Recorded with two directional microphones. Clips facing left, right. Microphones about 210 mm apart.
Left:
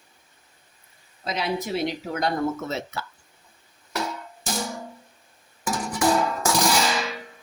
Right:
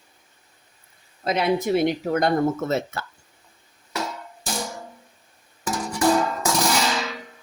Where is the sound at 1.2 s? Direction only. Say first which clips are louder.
Right 6 dB; 55° right (ahead or behind).